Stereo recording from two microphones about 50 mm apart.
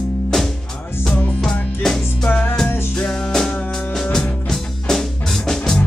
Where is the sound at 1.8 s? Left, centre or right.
Centre.